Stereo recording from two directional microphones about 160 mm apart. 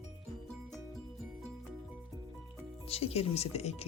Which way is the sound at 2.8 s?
40° left (ahead or behind).